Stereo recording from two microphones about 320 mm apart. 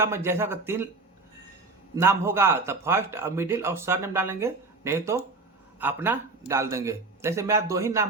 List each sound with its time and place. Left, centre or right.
0.0 s a man's voice: centre
2.0 s a man's voice: centre